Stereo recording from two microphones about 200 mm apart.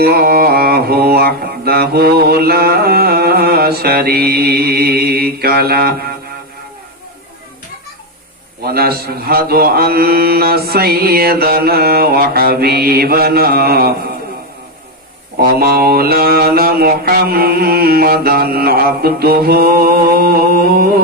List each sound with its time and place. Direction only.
0.0 s mantra: 50° right (ahead or behind)
8.6 s mantra: 50° right (ahead or behind)
15.4 s mantra: 50° right (ahead or behind)